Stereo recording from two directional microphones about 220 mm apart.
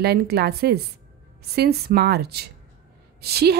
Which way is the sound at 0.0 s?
45° right (ahead or behind).